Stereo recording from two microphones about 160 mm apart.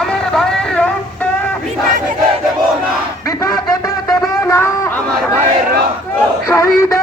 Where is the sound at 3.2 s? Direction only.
20° left (ahead or behind).